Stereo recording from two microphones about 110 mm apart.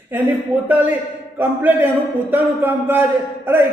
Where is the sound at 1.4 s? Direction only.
15° right (ahead or behind).